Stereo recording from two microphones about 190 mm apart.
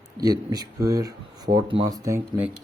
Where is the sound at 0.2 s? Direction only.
20° right (ahead or behind).